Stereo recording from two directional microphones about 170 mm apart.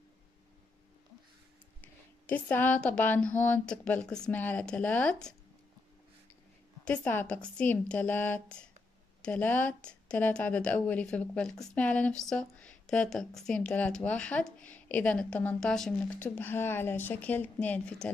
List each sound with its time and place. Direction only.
1.8 s a woman's voice: 10° left (ahead or behind)
6.8 s a woman's voice: 10° left (ahead or behind)